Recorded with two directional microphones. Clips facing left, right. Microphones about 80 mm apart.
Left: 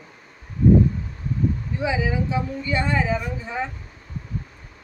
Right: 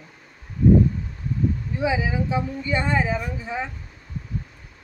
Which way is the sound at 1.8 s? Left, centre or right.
Centre.